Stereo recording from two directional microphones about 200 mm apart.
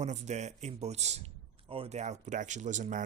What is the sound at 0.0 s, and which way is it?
Speech, 35° right (ahead or behind).